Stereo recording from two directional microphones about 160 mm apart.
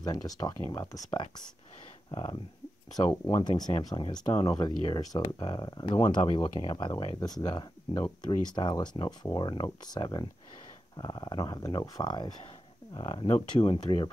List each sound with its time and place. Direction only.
0.0 s speech: 25° left (ahead or behind)
3.3 s speech: 25° left (ahead or behind)
5.9 s speech: 35° left (ahead or behind)